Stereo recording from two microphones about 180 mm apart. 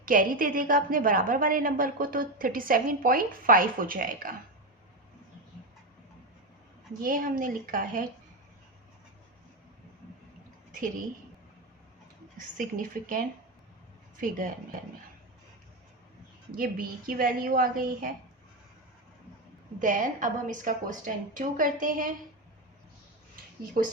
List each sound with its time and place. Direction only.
0.0 s a woman's voice: 50° right (ahead or behind)
7.0 s a woman's voice: 50° right (ahead or behind)
12.5 s a woman's voice: 50° right (ahead or behind)
16.5 s a woman's voice: 55° right (ahead or behind)
19.8 s a woman's voice: 45° right (ahead or behind)
23.8 s a woman's voice: 45° right (ahead or behind)